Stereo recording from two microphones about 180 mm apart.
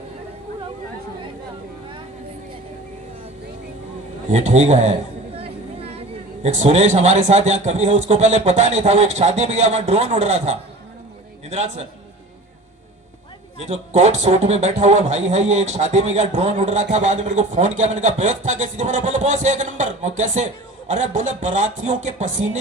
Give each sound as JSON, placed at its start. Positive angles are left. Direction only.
{"t": 4.3, "sound": "a man's voice", "side_deg": -40}
{"t": 13.7, "sound": "speech", "side_deg": -40}